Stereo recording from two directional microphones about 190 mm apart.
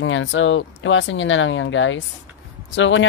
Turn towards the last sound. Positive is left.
turn(degrees=80)